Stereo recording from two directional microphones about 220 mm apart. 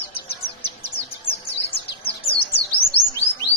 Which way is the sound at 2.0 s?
25° left (ahead or behind).